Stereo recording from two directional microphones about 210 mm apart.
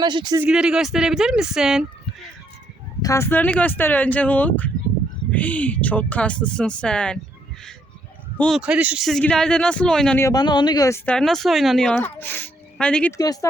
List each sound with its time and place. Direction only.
0.0 s speech: 20° right (ahead or behind)
0.4 s speech: 5° right (ahead or behind)
3.0 s speech: 15° left (ahead or behind)
8.4 s speech: centre (ahead or behind)
13.1 s speech: 15° left (ahead or behind)